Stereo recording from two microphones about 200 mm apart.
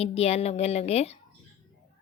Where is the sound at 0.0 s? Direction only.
30° left (ahead or behind).